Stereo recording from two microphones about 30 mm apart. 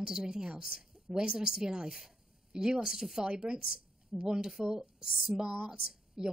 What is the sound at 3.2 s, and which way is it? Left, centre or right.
Speech, right.